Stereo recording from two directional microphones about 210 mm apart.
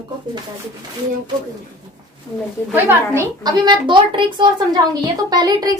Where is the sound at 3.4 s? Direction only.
20° right (ahead or behind).